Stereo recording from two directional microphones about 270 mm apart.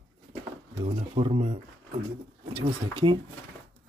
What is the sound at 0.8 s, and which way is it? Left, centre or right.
Speech, right.